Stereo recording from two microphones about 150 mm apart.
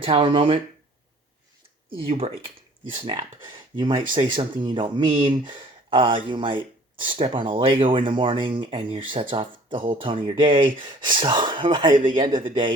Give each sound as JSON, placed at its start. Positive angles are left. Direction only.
{"t": 0.0, "sound": "speech", "side_deg": -35}
{"t": 2.0, "sound": "speech", "side_deg": -40}
{"t": 3.7, "sound": "speech", "side_deg": -60}
{"t": 4.1, "sound": "speech", "side_deg": -35}